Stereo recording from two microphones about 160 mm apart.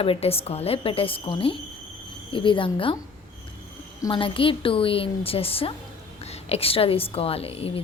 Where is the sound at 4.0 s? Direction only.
30° left (ahead or behind).